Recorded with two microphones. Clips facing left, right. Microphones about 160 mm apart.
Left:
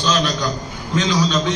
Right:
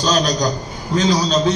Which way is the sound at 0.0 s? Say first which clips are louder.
Right 3 dB; 40° right (ahead or behind).